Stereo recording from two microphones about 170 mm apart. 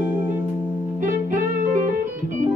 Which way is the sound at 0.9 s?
50° right (ahead or behind).